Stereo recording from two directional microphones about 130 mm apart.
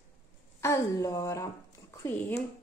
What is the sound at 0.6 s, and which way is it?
A woman's voice, 20° left (ahead or behind).